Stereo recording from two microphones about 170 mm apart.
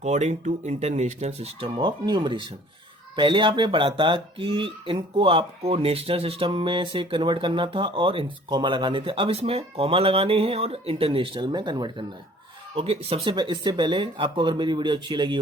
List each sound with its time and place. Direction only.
0.0 s speech: 40° right (ahead or behind)